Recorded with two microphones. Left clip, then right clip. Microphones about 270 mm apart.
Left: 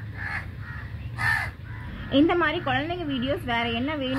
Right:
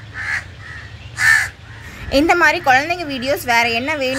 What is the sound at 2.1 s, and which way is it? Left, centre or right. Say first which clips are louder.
Speech: right 9 dB; right.